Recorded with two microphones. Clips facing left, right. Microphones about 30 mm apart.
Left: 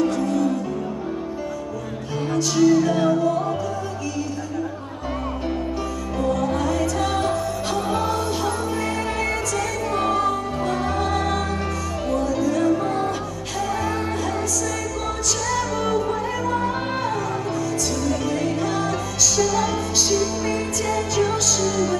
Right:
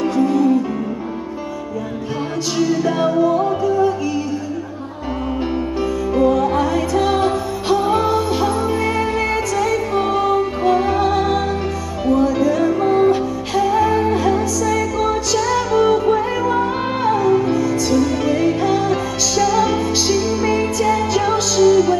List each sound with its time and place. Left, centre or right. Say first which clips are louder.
0.0 s music: right 5 dB; centre
2.5 s music: left 1 dB; centre
6.1 s music: right 7 dB; right